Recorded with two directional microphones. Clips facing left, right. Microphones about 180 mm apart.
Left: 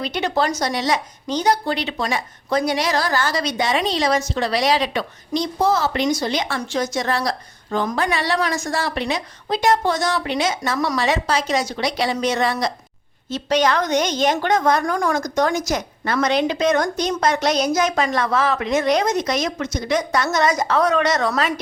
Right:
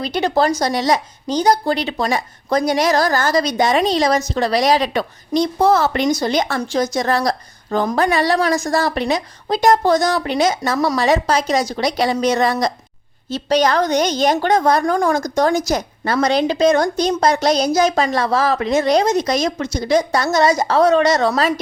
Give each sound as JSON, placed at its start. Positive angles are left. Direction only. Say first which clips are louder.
{"t": 0.0, "sound": "a woman's voice", "louder": "right 4 dB", "side_deg": -35}